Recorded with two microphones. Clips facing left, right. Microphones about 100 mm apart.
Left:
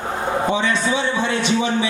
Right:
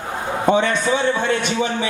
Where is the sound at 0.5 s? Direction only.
50° right (ahead or behind).